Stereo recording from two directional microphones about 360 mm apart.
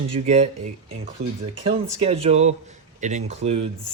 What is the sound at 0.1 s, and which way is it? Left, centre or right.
Speech, centre.